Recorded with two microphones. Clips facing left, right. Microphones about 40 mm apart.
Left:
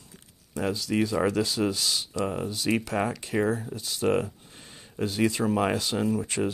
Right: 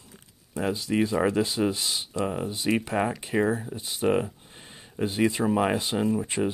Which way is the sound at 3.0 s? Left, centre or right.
Right.